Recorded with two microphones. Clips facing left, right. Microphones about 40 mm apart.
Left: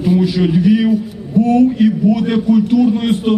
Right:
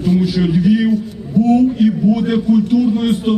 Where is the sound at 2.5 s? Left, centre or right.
Centre.